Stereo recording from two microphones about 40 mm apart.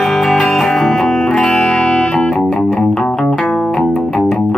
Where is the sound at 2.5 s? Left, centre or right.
Centre.